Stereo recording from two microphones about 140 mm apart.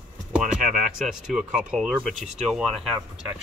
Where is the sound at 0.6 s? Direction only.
65° right (ahead or behind).